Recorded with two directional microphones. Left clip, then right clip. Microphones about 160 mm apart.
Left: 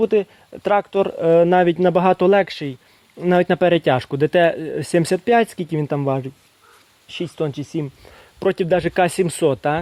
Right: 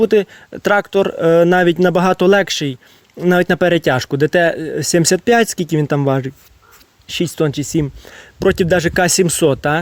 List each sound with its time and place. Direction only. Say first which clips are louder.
0.0 s speech: right 4 dB; 45° right (ahead or behind)